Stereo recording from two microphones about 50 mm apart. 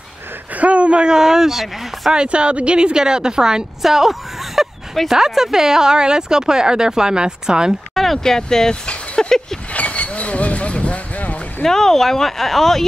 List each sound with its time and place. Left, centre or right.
0.6 s speech: right; by 2.2 s centre
2.2 s speech: right
3.8 s speech: centre
7.9 s a sound: centre
8.2 s speech: centre
9.7 s a sound: left
11.6 s speech: centre